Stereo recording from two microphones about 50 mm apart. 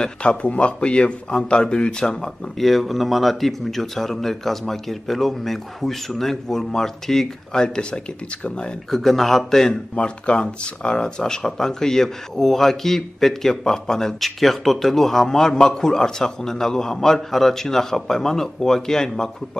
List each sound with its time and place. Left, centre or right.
0.0 s a man's voice: centre
2.6 s a man's voice: centre; by 8.7 s left
8.9 s speech: centre
9.9 s speech: left